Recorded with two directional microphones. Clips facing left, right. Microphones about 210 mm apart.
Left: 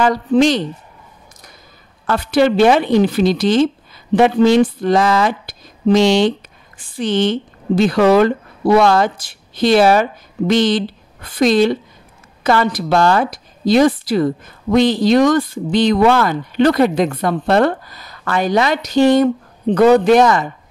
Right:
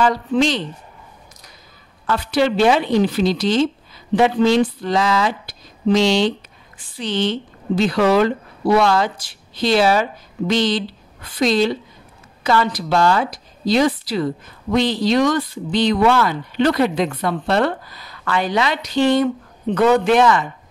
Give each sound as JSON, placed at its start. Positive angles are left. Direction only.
{"t": 0.0, "sound": "a woman's voice", "side_deg": 45}
{"t": 2.0, "sound": "a woman's voice", "side_deg": 50}